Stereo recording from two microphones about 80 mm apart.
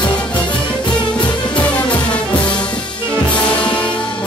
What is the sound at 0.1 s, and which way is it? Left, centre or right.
Music, centre.